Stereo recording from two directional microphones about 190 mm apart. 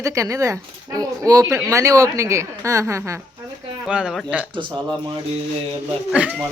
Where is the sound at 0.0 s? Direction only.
15° right (ahead or behind).